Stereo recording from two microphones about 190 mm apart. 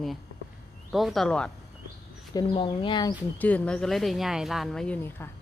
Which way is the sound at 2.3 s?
20° left (ahead or behind).